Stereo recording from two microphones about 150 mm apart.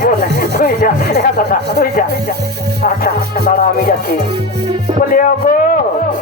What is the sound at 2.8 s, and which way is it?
Music, 85° left.